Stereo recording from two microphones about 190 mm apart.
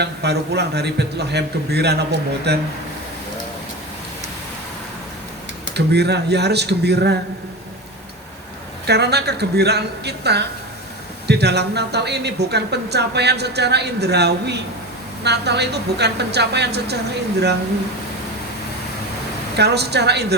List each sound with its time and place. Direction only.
0.0 s speech: 60° right (ahead or behind)
5.7 s speech: 60° right (ahead or behind)
8.9 s speech: 60° right (ahead or behind)
19.5 s speech: 60° right (ahead or behind)